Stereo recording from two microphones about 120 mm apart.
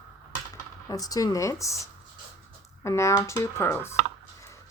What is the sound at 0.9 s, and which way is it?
A woman's voice, 30° left (ahead or behind).